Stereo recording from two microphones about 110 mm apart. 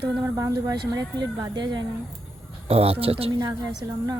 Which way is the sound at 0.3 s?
35° right (ahead or behind).